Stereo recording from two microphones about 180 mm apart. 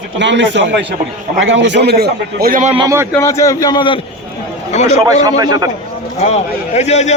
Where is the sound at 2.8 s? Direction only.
15° right (ahead or behind).